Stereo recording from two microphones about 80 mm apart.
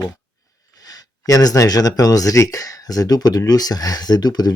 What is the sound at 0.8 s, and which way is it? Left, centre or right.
Speech, left.